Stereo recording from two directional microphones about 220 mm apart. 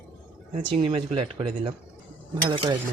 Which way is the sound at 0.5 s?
25° right (ahead or behind).